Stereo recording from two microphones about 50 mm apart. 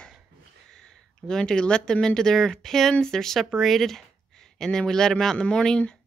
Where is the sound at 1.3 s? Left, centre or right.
Centre.